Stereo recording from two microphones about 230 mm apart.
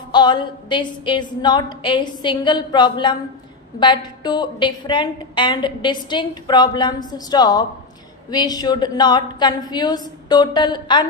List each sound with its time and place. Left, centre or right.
0.1 s a woman's voice: centre